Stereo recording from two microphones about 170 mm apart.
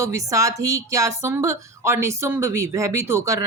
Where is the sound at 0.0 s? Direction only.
20° right (ahead or behind).